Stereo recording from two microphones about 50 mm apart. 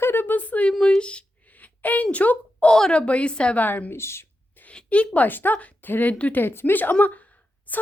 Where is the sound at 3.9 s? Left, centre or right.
Left.